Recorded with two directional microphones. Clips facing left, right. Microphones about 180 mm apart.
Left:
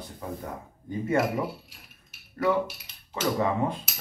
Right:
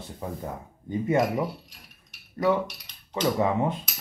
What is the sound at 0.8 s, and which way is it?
Speech, 20° right (ahead or behind).